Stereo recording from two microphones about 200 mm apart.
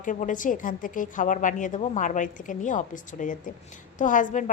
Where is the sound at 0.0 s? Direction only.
40° left (ahead or behind).